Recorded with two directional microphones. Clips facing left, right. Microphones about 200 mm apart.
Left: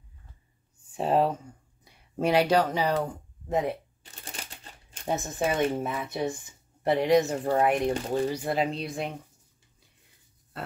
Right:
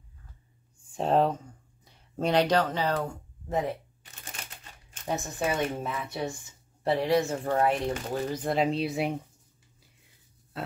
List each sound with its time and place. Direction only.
0.9 s speech: 5° left (ahead or behind)
5.0 s speech: 20° left (ahead or behind); by 9.1 s 5° right (ahead or behind)